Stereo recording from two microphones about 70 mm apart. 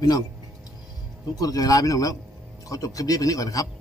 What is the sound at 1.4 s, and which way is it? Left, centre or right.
Speech, left.